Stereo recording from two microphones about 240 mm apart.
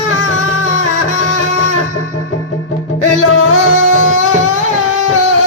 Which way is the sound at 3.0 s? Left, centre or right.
Left.